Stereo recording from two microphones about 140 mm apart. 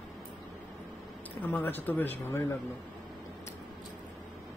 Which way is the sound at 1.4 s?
15° left (ahead or behind).